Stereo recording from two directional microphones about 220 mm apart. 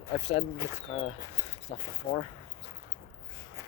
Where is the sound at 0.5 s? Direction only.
10° right (ahead or behind).